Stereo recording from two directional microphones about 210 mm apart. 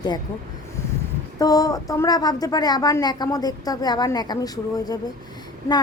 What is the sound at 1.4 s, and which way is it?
A woman's voice, 15° left (ahead or behind).